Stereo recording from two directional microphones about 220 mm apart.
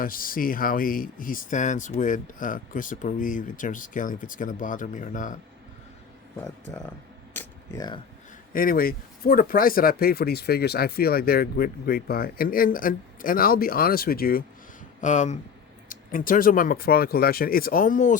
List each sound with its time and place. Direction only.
0.0 s speech: 40° left (ahead or behind)
7.3 s speech: 15° left (ahead or behind)
8.5 s speech: 40° left (ahead or behind)